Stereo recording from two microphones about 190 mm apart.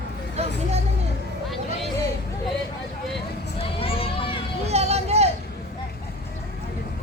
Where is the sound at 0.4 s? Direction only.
35° right (ahead or behind).